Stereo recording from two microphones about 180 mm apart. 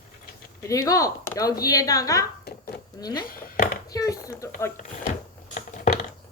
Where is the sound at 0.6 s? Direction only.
20° left (ahead or behind).